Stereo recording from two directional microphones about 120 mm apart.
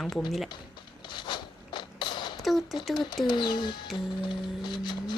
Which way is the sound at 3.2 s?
40° left (ahead or behind).